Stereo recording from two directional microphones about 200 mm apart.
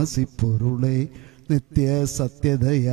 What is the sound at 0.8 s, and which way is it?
Mantra, centre (ahead or behind).